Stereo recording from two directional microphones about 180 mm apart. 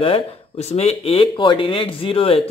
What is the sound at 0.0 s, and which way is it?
Speech, 35° left (ahead or behind).